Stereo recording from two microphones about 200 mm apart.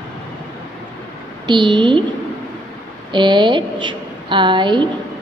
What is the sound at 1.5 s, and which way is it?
Speech, 25° right (ahead or behind).